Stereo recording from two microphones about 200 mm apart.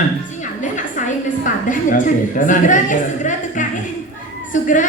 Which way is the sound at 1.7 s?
40° left (ahead or behind).